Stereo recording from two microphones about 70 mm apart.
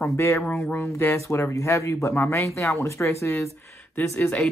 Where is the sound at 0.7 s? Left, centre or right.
Left.